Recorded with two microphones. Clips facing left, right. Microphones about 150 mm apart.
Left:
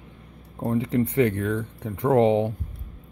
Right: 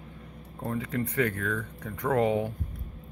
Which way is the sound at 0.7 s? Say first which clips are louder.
Left 8 dB; 25° left (ahead or behind).